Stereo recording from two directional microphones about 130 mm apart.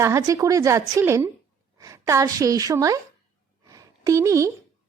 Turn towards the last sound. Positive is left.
turn(degrees=-25)  # may be behind; listen again after turning